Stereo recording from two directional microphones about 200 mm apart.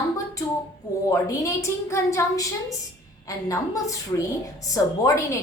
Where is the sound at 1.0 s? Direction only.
15° left (ahead or behind).